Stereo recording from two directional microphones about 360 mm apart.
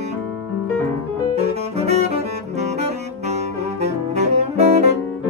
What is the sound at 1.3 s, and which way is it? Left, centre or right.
Saxophone, centre.